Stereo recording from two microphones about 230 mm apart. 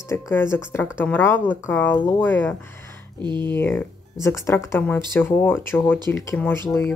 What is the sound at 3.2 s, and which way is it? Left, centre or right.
Speech, centre.